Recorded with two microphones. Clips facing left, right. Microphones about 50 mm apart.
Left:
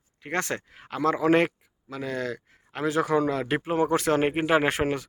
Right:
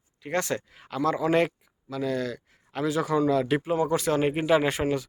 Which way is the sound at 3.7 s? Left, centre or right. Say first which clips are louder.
Left 3 dB; left.